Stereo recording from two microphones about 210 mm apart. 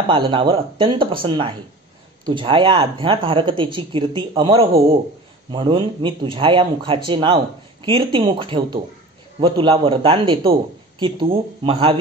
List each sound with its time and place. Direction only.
0.1 s speech: 25° right (ahead or behind)